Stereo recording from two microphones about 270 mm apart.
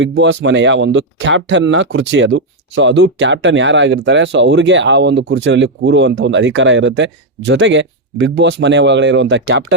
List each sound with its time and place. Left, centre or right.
0.0 s speech: right